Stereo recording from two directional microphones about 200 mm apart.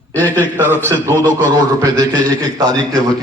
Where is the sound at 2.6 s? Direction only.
20° right (ahead or behind).